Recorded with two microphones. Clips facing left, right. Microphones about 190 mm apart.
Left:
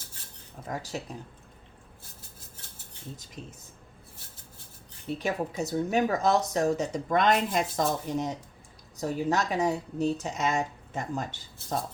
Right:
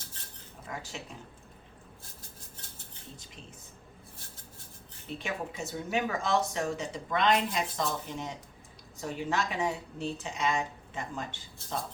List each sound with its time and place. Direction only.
0.7 s speech: 40° left (ahead or behind)
5.1 s speech: 40° left (ahead or behind)